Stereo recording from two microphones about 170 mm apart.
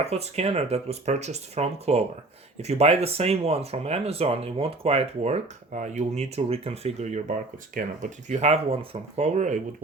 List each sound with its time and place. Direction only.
0.0 s speech: 40° right (ahead or behind)